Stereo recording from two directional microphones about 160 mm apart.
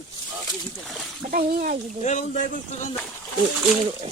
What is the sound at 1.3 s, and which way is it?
Speech, 60° right (ahead or behind).